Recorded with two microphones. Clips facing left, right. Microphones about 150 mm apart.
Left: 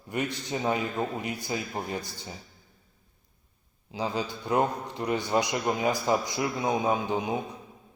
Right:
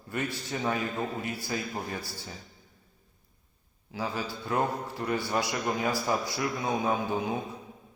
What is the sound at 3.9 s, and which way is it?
A man's voice, 20° left (ahead or behind).